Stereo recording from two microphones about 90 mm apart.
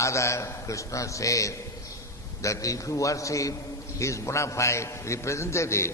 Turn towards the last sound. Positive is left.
turn(degrees=30)  # may be behind; listen again after turning